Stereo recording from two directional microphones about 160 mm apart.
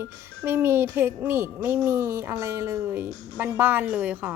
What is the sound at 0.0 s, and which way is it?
Speech, 15° right (ahead or behind).